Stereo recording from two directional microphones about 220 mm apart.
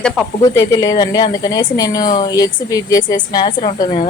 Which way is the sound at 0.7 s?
15° left (ahead or behind).